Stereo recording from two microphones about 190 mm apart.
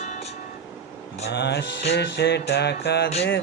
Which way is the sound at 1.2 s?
65° left (ahead or behind).